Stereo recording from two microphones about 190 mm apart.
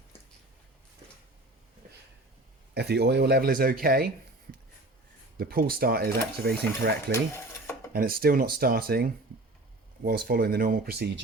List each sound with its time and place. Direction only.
2.7 s speech: 60° right (ahead or behind)
5.4 s speech: 50° right (ahead or behind)
7.1 s stir: 15° left (ahead or behind)
7.9 s speech: 50° right (ahead or behind)